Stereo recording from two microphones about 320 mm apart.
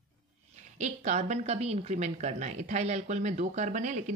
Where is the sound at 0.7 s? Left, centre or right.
Right.